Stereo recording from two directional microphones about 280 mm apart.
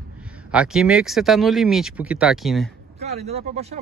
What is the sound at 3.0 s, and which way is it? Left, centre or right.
Speech, right.